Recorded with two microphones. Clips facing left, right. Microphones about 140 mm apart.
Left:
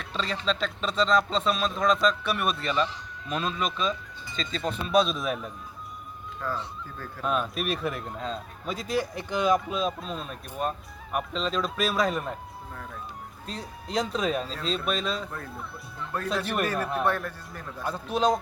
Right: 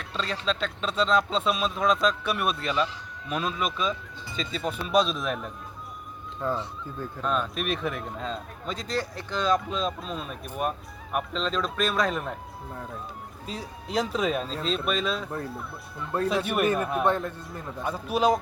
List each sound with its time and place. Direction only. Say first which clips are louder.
0.0 s a man's voice: even; centre (ahead or behind)
6.4 s a man's voice: right 4 dB; 25° right (ahead or behind)
7.2 s a man's voice: left 1 dB; 5° left (ahead or behind)
13.5 s a man's voice: right 1 dB; 5° right (ahead or behind)
16.1 s a man's voice: right 6 dB; 30° right (ahead or behind)
16.6 s a man's voice: right 4 dB; 20° right (ahead or behind)
17.8 s a man's voice: right 1 dB; 5° right (ahead or behind)